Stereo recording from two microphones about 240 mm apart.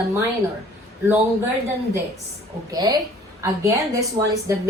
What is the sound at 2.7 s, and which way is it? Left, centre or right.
A woman's voice, centre.